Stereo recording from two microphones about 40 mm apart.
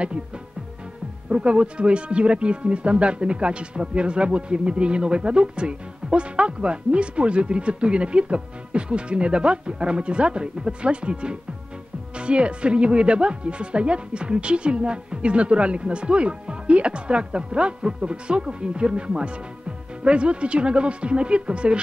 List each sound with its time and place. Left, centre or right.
1.3 s speech: right